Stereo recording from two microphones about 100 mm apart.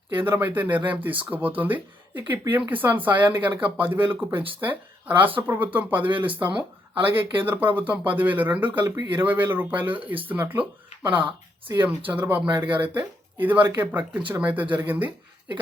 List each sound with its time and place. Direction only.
0.1 s speech: 20° right (ahead or behind)
6.0 s speech: 55° right (ahead or behind)
6.2 s speech: 15° right (ahead or behind)
8.8 s speech: 45° right (ahead or behind)
9.1 s speech: 20° right (ahead or behind)
9.9 s speech: 60° right (ahead or behind)
10.2 s speech: 20° right (ahead or behind)
11.8 s speech: 15° right (ahead or behind)
12.6 s speech: 60° right (ahead or behind)
13.0 s speech: 20° right (ahead or behind)